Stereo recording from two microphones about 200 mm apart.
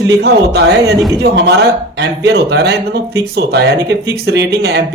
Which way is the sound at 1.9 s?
60° right (ahead or behind).